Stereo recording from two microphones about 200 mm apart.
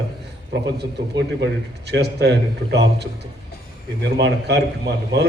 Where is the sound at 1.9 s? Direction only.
60° right (ahead or behind).